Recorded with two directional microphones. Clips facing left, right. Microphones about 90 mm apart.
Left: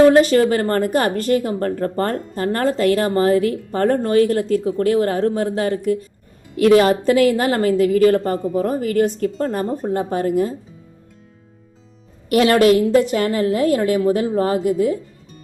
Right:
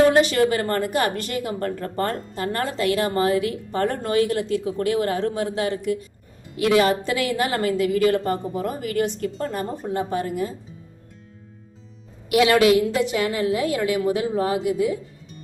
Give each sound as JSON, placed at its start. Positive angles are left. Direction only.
{"t": 0.1, "sound": "a woman's voice", "side_deg": 40}
{"t": 12.3, "sound": "a woman's voice", "side_deg": 45}